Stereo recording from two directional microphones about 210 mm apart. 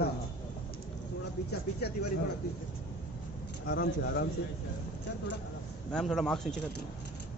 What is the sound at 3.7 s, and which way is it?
Speech, 50° left (ahead or behind).